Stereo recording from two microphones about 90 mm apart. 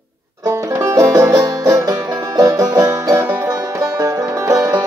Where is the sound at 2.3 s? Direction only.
40° right (ahead or behind).